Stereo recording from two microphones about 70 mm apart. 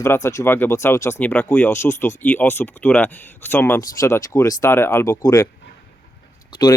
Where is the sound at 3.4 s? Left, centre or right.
Left.